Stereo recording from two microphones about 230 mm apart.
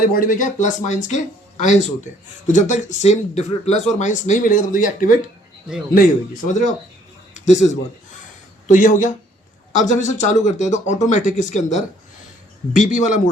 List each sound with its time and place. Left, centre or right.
0.0 s speech: left
7.3 s speech: left